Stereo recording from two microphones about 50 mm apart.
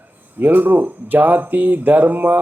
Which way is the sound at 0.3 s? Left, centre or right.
Right.